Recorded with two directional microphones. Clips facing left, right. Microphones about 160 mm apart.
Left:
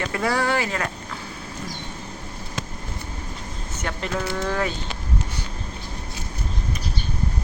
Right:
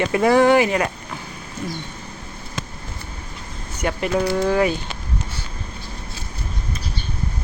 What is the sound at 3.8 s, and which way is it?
Speech, 15° right (ahead or behind).